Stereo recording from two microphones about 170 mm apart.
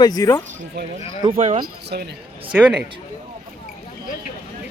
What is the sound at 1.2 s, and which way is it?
Speech, 35° right (ahead or behind).